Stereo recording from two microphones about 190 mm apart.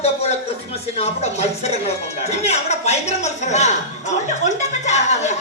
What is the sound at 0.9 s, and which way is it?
Speech, 35° left (ahead or behind).